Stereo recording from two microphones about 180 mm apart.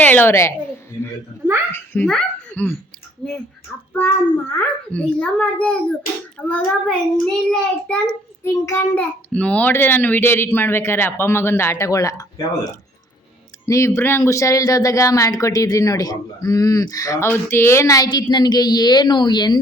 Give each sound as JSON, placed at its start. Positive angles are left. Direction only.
{"t": 0.0, "sound": "a child's voice", "side_deg": 10}
{"t": 1.7, "sound": "speech", "side_deg": 10}
{"t": 3.9, "sound": "a child's voice", "side_deg": 10}
{"t": 13.7, "sound": "speech", "side_deg": 15}